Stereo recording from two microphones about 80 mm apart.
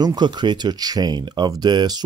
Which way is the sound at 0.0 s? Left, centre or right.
Right.